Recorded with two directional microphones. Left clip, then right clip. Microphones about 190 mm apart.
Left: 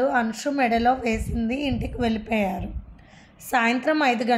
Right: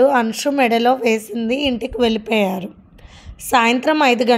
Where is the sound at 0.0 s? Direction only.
50° right (ahead or behind).